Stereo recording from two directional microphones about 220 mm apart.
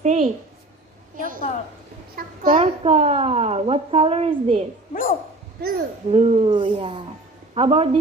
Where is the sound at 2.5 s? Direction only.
25° right (ahead or behind).